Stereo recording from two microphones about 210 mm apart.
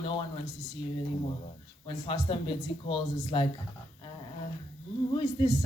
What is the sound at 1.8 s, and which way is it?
Speech, 25° left (ahead or behind).